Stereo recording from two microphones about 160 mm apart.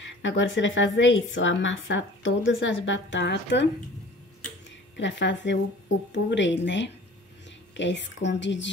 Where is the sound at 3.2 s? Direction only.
90° left.